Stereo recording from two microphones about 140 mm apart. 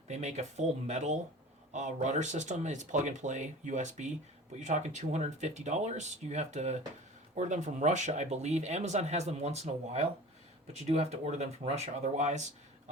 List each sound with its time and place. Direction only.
0.1 s speech: 55° right (ahead or behind)